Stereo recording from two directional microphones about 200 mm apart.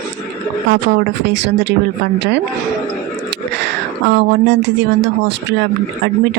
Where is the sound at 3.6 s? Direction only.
60° right (ahead or behind).